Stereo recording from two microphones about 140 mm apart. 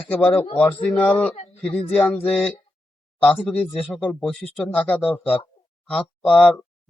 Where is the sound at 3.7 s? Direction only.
Centre (ahead or behind).